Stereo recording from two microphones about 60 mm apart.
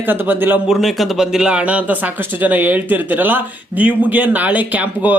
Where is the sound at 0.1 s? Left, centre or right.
Right.